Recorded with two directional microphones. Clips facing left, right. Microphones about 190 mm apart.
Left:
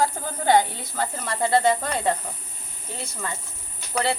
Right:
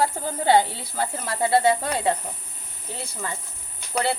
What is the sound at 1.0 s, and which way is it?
Speech, 5° right (ahead or behind).